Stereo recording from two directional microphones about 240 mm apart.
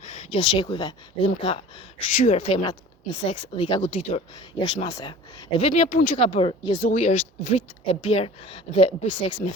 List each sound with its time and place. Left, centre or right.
0.0 s speech: left